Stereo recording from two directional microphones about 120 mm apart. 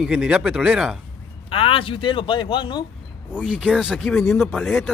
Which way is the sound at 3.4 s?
Centre (ahead or behind).